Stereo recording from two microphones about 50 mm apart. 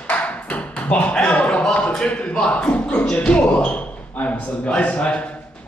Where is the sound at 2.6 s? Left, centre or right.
Left.